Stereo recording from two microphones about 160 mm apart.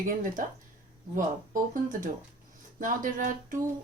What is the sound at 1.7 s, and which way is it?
A woman's voice, 55° right (ahead or behind).